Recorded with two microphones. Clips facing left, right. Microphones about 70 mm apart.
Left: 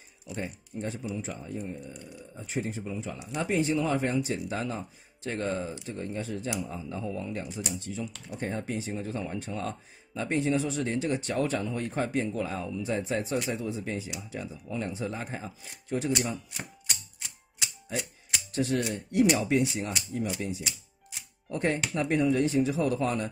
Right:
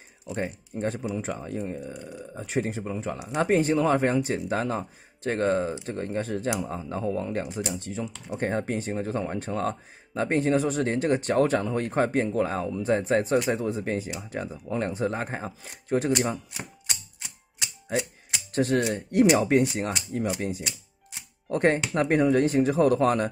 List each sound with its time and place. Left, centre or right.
0.4 s speech: right
1.7 s speech: right
18.5 s speech: right